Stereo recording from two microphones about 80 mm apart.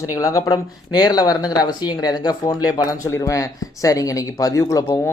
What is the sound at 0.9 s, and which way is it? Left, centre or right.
Speech, left.